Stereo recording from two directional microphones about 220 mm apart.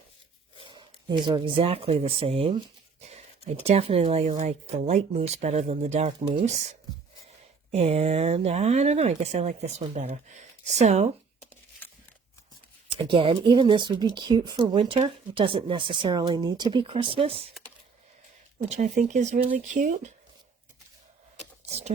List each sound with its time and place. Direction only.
0.6 s speech: 20° right (ahead or behind)
12.9 s speech: 25° right (ahead or behind)
18.7 s speech: 35° right (ahead or behind)
21.7 s a sound: 30° right (ahead or behind)